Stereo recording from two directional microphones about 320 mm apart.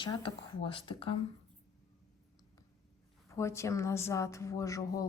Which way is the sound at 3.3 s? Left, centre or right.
Centre.